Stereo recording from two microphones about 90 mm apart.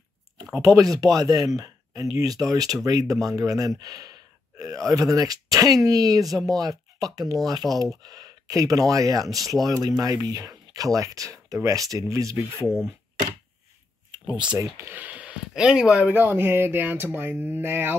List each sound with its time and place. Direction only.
0.6 s speech: 40° right (ahead or behind)
12.6 s speech: 5° left (ahead or behind)
14.2 s speech: 60° right (ahead or behind)
14.6 s speech: 30° right (ahead or behind)
15.0 s speech: 15° right (ahead or behind)
16.2 s speech: 25° right (ahead or behind)